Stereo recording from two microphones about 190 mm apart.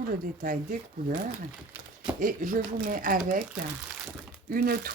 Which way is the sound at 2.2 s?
45° right (ahead or behind).